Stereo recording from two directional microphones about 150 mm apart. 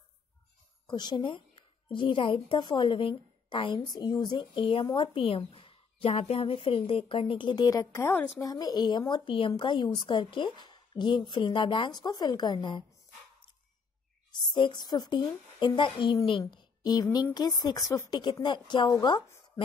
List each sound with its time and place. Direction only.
0.8 s a woman's voice: 30° left (ahead or behind)
14.3 s a woman's voice: 30° left (ahead or behind)